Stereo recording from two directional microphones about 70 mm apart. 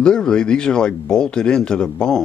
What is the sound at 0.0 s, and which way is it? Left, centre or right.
Speech, centre.